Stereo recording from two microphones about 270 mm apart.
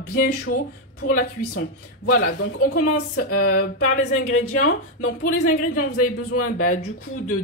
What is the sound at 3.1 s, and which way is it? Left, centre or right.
Speech, left.